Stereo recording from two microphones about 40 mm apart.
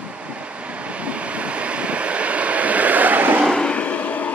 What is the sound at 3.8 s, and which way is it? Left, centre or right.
Vehicle, left.